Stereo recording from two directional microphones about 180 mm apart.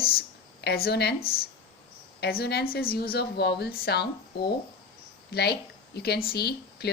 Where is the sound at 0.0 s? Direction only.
55° left (ahead or behind).